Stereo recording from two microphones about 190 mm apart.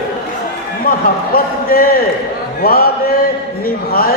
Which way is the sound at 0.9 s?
50° left (ahead or behind).